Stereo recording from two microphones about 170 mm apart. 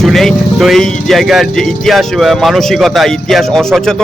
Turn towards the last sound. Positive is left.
turn(degrees=5)  # may be behind; listen again after turning